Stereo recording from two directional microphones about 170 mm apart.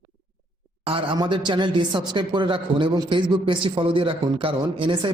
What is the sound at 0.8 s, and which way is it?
Speech, 30° right (ahead or behind).